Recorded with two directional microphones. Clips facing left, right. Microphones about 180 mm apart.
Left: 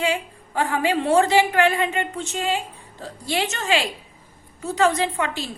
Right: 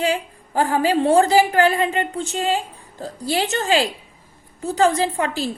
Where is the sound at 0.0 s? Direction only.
35° right (ahead or behind).